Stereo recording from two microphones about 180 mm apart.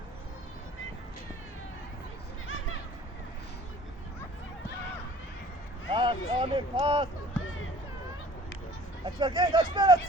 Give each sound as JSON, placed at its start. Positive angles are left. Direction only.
{"t": 5.9, "sound": "speech", "side_deg": -30}
{"t": 9.0, "sound": "speech", "side_deg": -25}